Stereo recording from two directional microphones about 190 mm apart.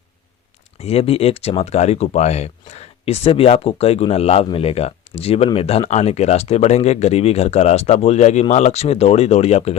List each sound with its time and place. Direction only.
0.8 s speech: 30° left (ahead or behind)